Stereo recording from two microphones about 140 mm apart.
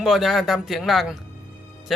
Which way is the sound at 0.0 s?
Centre (ahead or behind).